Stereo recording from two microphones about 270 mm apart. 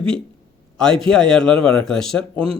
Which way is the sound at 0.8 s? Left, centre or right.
Centre.